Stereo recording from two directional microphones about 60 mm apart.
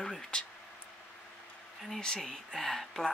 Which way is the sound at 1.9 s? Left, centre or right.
Centre.